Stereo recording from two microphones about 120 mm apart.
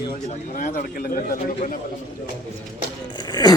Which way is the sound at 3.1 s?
35° left (ahead or behind).